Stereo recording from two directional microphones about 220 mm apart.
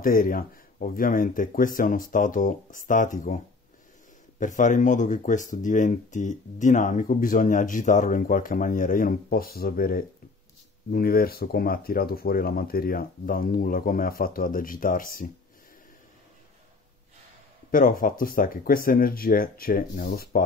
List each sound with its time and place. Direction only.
0.0 s speech: 40° left (ahead or behind)
4.4 s speech: 35° left (ahead or behind)
17.6 s speech: 40° left (ahead or behind)